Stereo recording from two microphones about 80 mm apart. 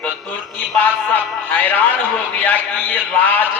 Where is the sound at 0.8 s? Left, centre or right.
Left.